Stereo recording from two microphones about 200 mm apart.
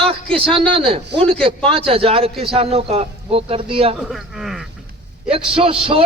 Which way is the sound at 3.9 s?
Centre (ahead or behind).